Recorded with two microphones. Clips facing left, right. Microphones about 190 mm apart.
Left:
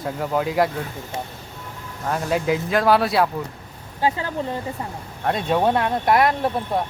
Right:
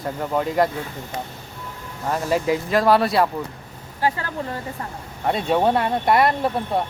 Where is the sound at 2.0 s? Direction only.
Centre (ahead or behind).